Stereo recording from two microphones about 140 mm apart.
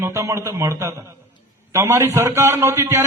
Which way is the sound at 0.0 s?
20° right (ahead or behind).